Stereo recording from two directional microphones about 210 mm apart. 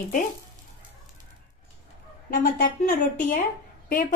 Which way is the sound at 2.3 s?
40° left (ahead or behind).